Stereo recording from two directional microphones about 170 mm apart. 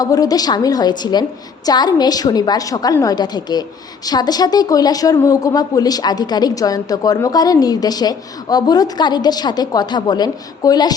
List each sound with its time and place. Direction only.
0.0 s a woman's voice: 20° left (ahead or behind)